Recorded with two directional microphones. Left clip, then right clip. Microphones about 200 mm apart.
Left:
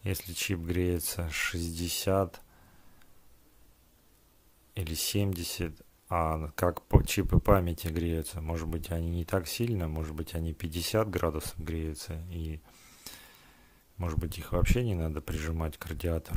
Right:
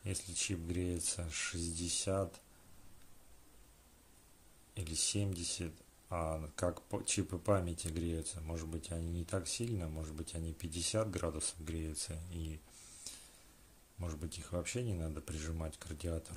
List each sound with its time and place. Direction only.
0.0 s speech: 40° left (ahead or behind)
4.7 s speech: 40° left (ahead or behind)